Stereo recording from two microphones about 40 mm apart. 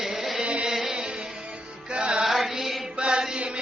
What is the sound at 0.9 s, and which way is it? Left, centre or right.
Music, right.